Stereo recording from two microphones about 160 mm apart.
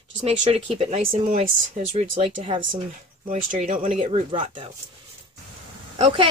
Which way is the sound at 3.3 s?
50° right (ahead or behind).